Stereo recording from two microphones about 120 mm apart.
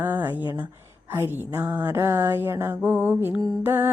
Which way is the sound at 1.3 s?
15° right (ahead or behind).